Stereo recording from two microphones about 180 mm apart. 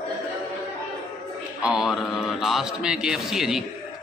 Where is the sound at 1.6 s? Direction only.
5° right (ahead or behind).